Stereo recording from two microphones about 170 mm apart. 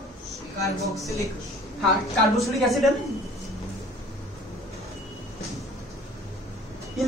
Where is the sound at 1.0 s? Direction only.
20° left (ahead or behind).